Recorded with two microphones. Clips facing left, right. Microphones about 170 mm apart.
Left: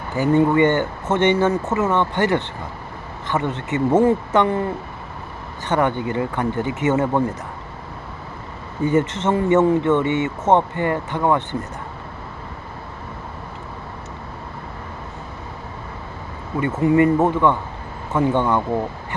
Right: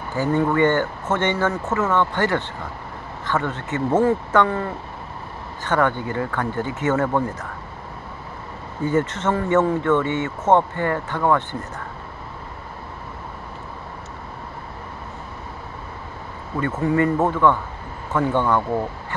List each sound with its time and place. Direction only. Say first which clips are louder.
0.1 s speech: left 4 dB; 15° left (ahead or behind)
8.8 s speech: left 2 dB; 20° left (ahead or behind)
16.5 s speech: left 4 dB; 15° left (ahead or behind)